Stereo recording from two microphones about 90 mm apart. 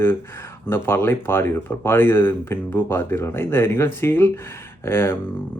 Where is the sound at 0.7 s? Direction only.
25° left (ahead or behind).